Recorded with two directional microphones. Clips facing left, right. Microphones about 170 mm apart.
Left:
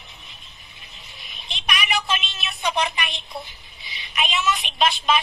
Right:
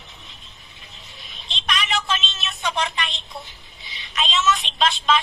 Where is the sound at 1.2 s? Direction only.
10° left (ahead or behind).